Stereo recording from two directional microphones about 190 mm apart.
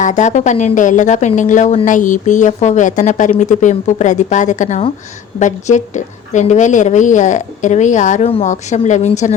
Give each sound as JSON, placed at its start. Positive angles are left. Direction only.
{"t": 0.0, "sound": "speech", "side_deg": 40}